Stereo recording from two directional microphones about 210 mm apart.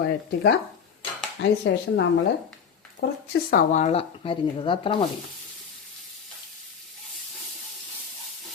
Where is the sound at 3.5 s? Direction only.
35° left (ahead or behind).